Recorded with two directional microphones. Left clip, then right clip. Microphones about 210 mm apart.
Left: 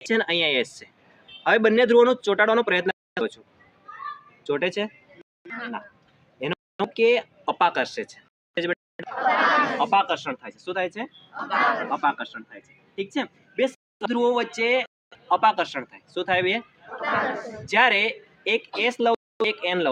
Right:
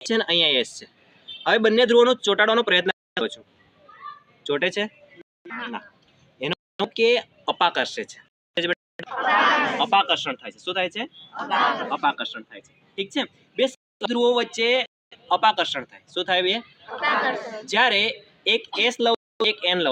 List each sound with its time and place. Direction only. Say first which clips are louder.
0.0 s speech: right 2 dB; 10° left (ahead or behind)
4.4 s speech: right 2 dB; 5° left (ahead or behind)
5.5 s a sound: right 1 dB; 35° right (ahead or behind)
6.4 s a sound: right 1 dB; 5° left (ahead or behind)
9.0 s chatter: right 2 dB; 35° right (ahead or behind)
9.7 s speech: right 1 dB; 5° left (ahead or behind)
11.3 s a man's voice: right 1 dB; 25° right (ahead or behind)
11.6 s a man's voice: left 1 dB; 40° right (ahead or behind)
11.9 s speech: right 1 dB; 5° left (ahead or behind)
17.7 s speech: even; 10° left (ahead or behind)